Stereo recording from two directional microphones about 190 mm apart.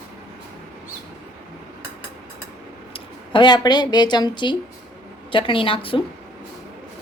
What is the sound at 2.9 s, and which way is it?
A woman's voice, 25° left (ahead or behind).